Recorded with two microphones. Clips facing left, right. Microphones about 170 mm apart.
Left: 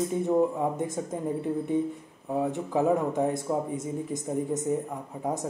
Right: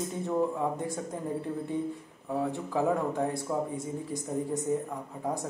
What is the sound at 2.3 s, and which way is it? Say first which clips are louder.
Speech: left 3 dB; 20° left (ahead or behind).